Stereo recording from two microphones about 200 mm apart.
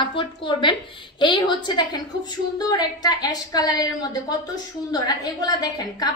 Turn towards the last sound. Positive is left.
turn(degrees=20)  # may be behind; listen again after turning